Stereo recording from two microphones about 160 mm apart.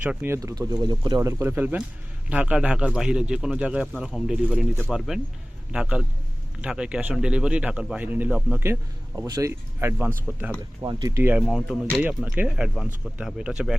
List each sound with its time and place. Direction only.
0.0 s speech: 10° right (ahead or behind)
10.8 s speech: 25° right (ahead or behind)
11.2 s speech: 10° right (ahead or behind)
11.4 s speech: centre (ahead or behind)
12.0 s speech: 10° right (ahead or behind)